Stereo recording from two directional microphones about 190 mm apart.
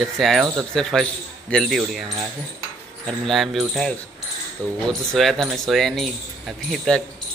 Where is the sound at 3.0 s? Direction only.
Centre (ahead or behind).